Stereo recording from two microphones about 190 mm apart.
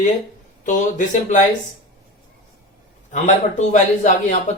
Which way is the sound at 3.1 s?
40° left (ahead or behind).